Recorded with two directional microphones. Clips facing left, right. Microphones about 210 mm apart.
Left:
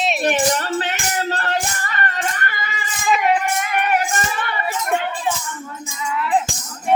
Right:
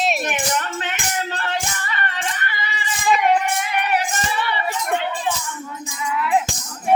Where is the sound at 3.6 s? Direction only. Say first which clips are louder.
Left 2 dB; 45° left (ahead or behind).